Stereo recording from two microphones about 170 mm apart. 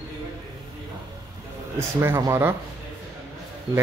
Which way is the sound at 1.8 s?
15° right (ahead or behind).